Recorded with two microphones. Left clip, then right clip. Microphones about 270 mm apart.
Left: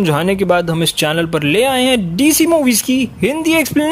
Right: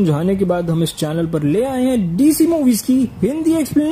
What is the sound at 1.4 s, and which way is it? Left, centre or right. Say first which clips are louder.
Speech: left 5 dB; left.